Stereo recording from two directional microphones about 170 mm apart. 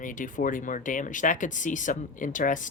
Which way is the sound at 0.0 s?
50° left (ahead or behind).